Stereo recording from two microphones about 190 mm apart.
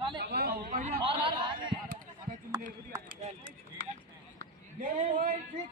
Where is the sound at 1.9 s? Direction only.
45° right (ahead or behind).